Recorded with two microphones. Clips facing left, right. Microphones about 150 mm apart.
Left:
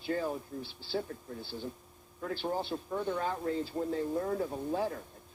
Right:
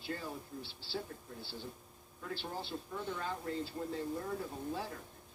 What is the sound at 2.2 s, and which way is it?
A man's voice, 55° left (ahead or behind).